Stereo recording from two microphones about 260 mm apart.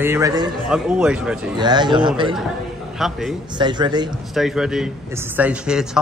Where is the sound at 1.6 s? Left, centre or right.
Centre.